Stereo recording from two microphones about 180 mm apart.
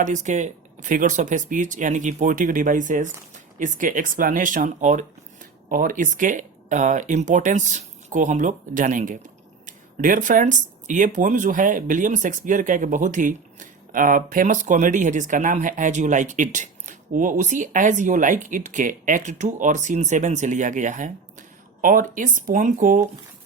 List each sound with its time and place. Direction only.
0.0 s speech: 40° right (ahead or behind)